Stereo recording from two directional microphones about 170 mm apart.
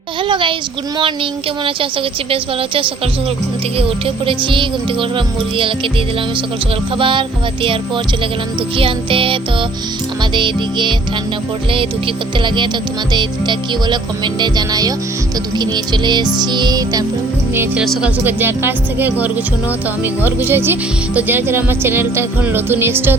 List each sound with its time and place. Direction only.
0.3 s music: 30° right (ahead or behind)
6.9 s music: 30° right (ahead or behind)
8.8 s music: 30° right (ahead or behind)
17.5 s speech: 15° right (ahead or behind)